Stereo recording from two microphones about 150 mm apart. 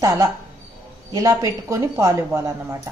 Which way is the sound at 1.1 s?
20° right (ahead or behind).